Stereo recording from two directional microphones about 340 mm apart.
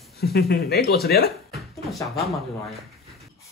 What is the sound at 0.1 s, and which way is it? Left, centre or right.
Speech, left.